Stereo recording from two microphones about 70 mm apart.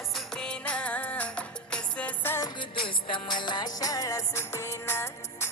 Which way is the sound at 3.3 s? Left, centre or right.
Left.